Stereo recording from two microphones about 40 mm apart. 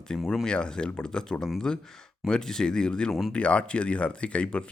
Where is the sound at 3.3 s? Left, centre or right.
Left.